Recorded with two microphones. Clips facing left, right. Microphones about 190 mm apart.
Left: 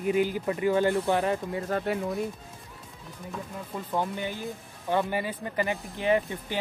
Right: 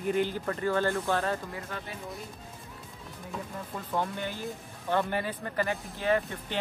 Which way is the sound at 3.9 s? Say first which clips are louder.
Left 2 dB; 15° left (ahead or behind).